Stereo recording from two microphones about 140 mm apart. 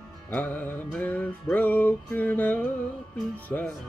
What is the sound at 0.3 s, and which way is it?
Music, 10° left (ahead or behind).